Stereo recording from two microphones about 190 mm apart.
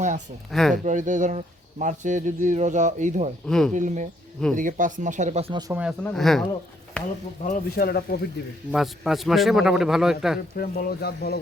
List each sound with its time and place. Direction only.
0.5 s a man's voice: centre (ahead or behind)
0.9 s speech: 40° right (ahead or behind)
3.4 s a man's voice: centre (ahead or behind)
3.7 s speech: 40° right (ahead or behind)
6.0 s a man's voice: 5° left (ahead or behind)
7.4 s speech: 50° left (ahead or behind)
8.7 s a man's voice: centre (ahead or behind)
10.5 s speech: 55° left (ahead or behind)